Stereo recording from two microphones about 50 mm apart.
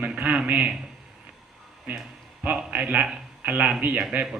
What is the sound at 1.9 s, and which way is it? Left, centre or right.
Speech, right.